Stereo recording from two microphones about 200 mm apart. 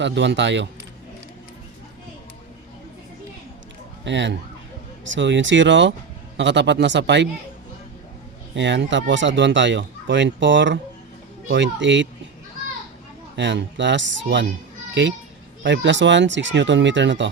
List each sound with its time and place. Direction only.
0.0 s speech: 65° right (ahead or behind)
4.0 s speech: 65° right (ahead or behind)
8.5 s speech: 60° right (ahead or behind)
13.3 s speech: 60° right (ahead or behind)
15.6 s speech: 65° right (ahead or behind)